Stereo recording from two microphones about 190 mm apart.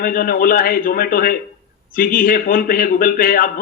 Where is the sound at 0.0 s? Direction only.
50° left (ahead or behind).